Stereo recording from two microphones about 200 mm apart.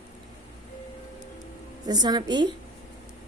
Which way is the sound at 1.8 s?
20° right (ahead or behind).